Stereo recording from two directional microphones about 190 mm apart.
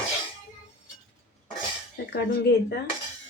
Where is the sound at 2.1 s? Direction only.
60° left (ahead or behind).